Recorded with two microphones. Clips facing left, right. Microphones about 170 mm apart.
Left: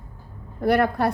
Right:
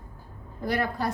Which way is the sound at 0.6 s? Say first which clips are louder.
Left 8 dB; 60° left (ahead or behind).